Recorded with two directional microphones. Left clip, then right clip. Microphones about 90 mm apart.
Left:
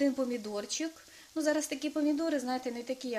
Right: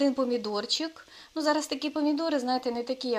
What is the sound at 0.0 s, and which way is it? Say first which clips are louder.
Speech: right 5 dB; 20° right (ahead or behind).